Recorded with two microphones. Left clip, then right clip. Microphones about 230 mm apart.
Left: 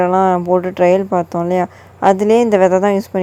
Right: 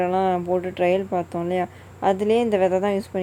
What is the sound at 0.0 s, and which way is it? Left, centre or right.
Speech, left.